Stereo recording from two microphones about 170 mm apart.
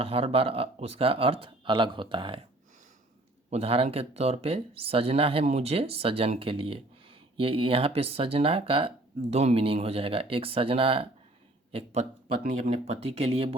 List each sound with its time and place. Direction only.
0.0 s speech: 35° right (ahead or behind)
3.5 s speech: 35° right (ahead or behind)
12.4 s speech: 55° right (ahead or behind)
12.9 s speech: 35° right (ahead or behind)